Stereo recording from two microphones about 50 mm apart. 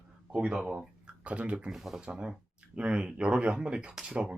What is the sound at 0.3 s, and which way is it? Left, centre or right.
Speech, centre.